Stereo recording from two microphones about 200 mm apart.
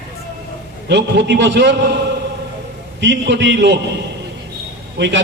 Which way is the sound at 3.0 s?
60° right (ahead or behind).